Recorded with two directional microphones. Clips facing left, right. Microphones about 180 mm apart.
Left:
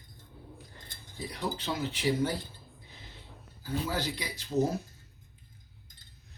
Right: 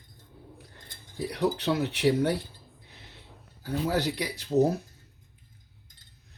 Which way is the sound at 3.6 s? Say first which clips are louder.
Right 5 dB; 65° right (ahead or behind).